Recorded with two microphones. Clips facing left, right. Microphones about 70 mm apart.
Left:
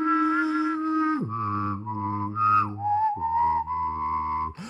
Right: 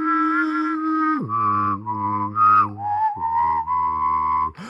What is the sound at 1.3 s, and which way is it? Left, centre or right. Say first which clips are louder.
Music: right 9 dB; right.